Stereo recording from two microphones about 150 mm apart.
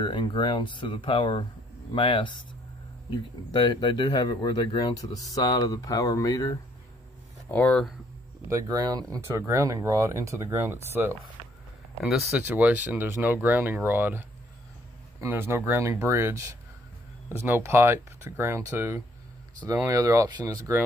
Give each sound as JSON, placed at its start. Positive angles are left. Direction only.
{"t": 0.0, "sound": "speech", "side_deg": 35}
{"t": 7.5, "sound": "speech", "side_deg": 5}
{"t": 8.5, "sound": "speech", "side_deg": -20}
{"t": 12.0, "sound": "speech", "side_deg": 0}